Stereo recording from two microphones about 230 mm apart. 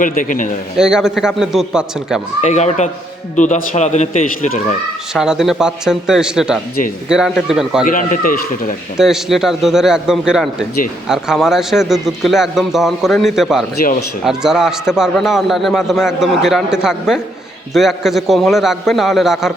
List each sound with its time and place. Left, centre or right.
0.0 s a man's voice: left
0.8 s a man's voice: centre
2.4 s a man's voice: left
5.1 s a man's voice: centre
7.9 s a man's voice: left
9.0 s a man's voice: centre